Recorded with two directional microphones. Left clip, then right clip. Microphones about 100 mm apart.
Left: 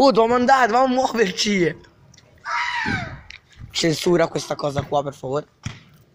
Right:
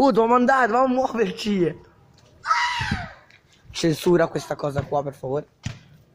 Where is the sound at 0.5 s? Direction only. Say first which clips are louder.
Left 3 dB; 15° right (ahead or behind).